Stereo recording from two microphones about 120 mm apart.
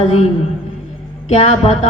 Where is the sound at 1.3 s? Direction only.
65° left (ahead or behind).